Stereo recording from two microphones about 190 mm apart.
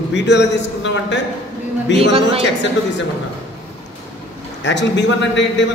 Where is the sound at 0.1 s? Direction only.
65° left (ahead or behind).